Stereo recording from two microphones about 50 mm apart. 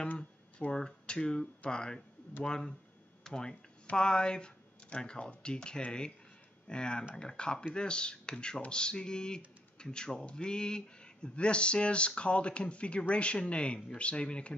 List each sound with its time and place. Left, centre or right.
0.2 s speech: left